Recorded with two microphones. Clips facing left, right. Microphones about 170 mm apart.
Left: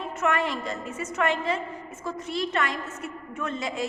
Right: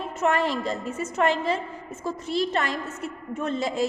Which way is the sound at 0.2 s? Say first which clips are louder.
Right 3 dB; 30° right (ahead or behind).